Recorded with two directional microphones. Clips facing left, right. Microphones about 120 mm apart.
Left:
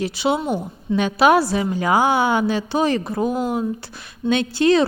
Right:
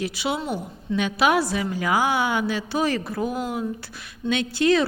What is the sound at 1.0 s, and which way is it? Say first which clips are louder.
A woman's voice: left 5 dB; 35° left (ahead or behind).